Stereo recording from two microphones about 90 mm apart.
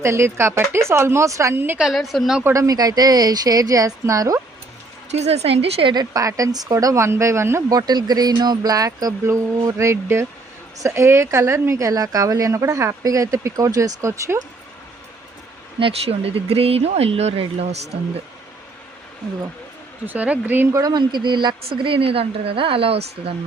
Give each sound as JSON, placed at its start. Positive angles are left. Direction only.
{"t": 0.0, "sound": "speech", "side_deg": -30}
{"t": 1.8, "sound": "a woman's voice", "side_deg": 0}
{"t": 2.4, "sound": "speech", "side_deg": -35}
{"t": 5.5, "sound": "a woman's voice", "side_deg": -90}
{"t": 5.9, "sound": "a woman's voice", "side_deg": -45}
{"t": 7.7, "sound": "a woman's voice", "side_deg": -45}
{"t": 15.8, "sound": "a woman's voice", "side_deg": -90}
{"t": 20.1, "sound": "speech", "side_deg": -15}
{"t": 20.7, "sound": "speech", "side_deg": -45}
{"t": 21.0, "sound": "a woman's voice", "side_deg": -60}